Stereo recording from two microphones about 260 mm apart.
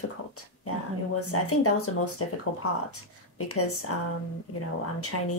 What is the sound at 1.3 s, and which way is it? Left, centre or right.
Speech, left.